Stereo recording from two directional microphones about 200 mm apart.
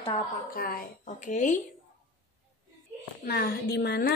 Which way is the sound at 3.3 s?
55° left (ahead or behind).